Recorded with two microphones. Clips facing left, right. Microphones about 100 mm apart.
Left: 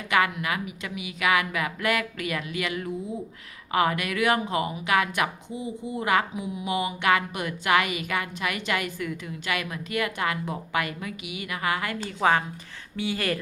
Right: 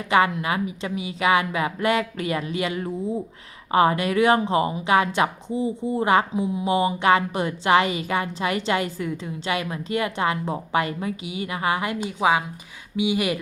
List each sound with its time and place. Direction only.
0.1 s speech: 25° right (ahead or behind)